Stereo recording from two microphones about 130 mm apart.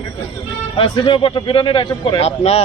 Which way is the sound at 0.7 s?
40° left (ahead or behind).